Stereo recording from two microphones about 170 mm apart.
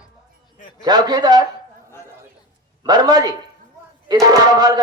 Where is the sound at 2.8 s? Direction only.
25° right (ahead or behind).